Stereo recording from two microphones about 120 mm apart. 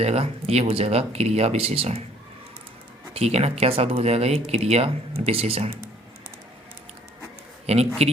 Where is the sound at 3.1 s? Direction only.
60° right (ahead or behind).